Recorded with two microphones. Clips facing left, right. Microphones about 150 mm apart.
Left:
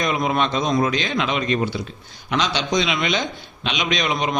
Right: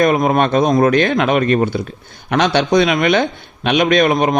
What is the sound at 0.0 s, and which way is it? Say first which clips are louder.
A man's voice: right 8 dB; 50° right (ahead or behind).